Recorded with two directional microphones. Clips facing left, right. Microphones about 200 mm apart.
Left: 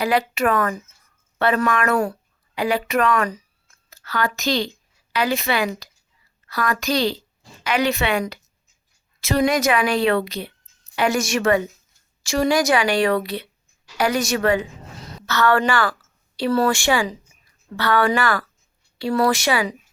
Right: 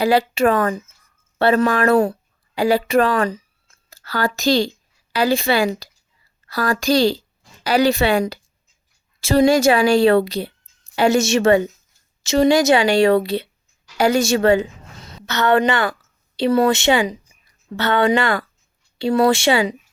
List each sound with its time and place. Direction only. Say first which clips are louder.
0.0 s a woman's voice: right 4 dB; 30° right (ahead or behind)